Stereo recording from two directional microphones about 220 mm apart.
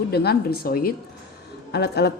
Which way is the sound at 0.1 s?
45° left (ahead or behind).